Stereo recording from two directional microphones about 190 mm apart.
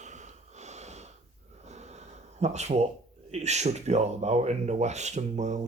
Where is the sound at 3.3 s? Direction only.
35° right (ahead or behind).